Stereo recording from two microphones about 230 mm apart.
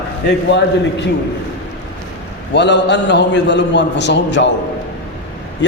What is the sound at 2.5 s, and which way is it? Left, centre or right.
A man's voice, left.